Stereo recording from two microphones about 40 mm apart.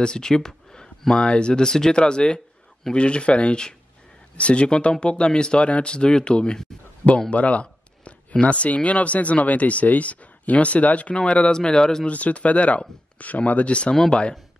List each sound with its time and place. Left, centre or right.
0.0 s speech: centre
11.5 s speech: centre
12.1 s speech: left